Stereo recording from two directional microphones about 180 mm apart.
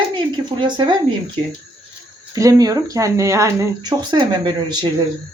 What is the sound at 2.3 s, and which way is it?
Speech, 20° right (ahead or behind).